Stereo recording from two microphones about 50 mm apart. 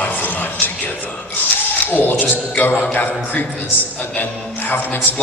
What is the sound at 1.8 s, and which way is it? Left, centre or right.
Speech, left.